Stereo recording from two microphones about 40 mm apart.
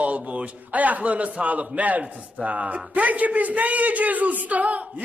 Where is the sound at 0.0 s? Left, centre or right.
Right.